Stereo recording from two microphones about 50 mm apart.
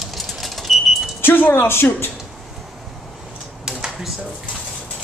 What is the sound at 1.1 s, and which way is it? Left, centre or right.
Speech, left.